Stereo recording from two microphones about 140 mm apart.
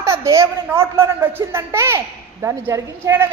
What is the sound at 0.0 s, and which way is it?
A woman's voice, 20° right (ahead or behind).